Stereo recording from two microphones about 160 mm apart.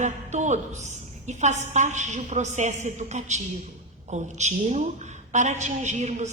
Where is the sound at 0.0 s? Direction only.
45° right (ahead or behind).